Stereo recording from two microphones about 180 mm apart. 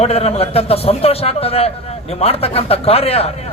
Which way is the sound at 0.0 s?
35° left (ahead or behind).